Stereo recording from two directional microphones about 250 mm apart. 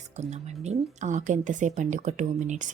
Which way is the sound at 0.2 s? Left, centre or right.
Right.